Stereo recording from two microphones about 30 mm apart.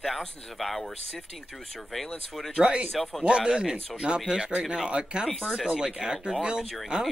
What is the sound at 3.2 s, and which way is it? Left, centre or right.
Speech, right.